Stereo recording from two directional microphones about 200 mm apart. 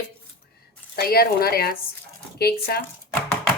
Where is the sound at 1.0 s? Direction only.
50° left (ahead or behind).